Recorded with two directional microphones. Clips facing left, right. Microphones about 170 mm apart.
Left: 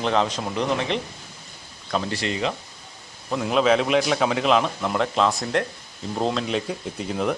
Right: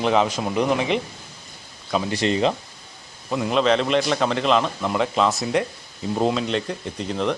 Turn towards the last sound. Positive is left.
turn(degrees=5)  # may be behind; listen again after turning